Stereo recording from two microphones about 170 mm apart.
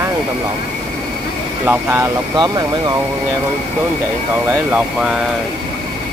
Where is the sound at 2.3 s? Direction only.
25° right (ahead or behind).